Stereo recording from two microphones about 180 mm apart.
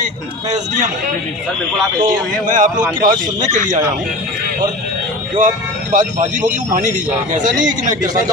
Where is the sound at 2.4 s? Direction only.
45° right (ahead or behind).